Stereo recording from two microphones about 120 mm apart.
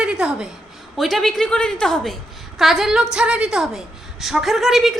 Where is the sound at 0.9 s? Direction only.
Centre (ahead or behind).